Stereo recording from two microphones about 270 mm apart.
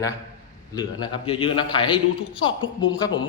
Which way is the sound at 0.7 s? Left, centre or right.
Centre.